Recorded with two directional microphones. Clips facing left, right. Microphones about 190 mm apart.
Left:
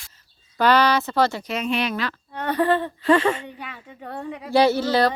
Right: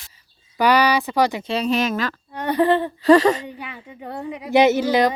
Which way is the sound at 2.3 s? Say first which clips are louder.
Right 3 dB; 15° right (ahead or behind).